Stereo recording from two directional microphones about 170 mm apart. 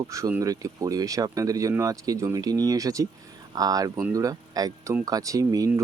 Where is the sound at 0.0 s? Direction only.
20° right (ahead or behind).